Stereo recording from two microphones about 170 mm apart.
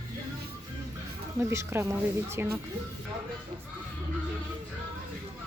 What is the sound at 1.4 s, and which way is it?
Speech, 15° right (ahead or behind).